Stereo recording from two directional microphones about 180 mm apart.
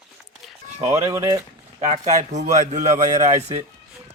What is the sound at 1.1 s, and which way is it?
Speech, 20° right (ahead or behind).